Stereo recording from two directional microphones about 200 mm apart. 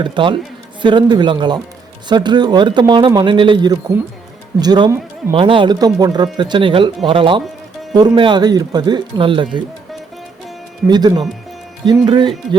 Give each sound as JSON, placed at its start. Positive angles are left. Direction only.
{"t": 0.0, "sound": "speech", "side_deg": -25}
{"t": 10.8, "sound": "speech", "side_deg": -20}